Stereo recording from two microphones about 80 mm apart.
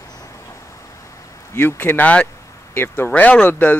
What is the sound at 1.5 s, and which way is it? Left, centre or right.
Speech, left.